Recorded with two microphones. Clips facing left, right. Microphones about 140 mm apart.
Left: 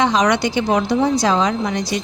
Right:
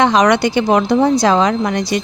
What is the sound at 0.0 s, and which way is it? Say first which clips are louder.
A woman's voice: right 4 dB; 60° right (ahead or behind).